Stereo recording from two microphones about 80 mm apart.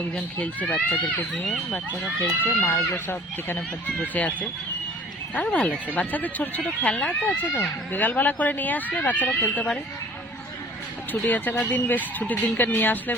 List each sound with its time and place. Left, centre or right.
0.2 s speech: centre
2.0 s speech: left
11.1 s speech: left